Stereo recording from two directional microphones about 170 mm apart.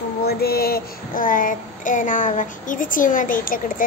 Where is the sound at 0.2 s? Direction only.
65° left (ahead or behind).